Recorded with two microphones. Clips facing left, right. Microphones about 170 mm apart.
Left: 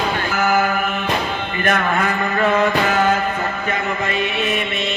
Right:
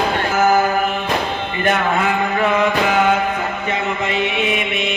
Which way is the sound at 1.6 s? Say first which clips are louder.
Right 1 dB; 15° right (ahead or behind).